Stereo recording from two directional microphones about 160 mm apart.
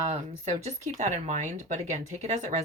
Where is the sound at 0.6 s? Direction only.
45° right (ahead or behind).